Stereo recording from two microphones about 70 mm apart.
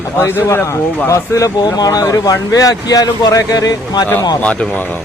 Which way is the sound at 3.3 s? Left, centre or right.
Left.